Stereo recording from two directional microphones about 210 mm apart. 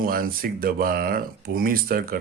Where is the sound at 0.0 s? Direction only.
45° right (ahead or behind).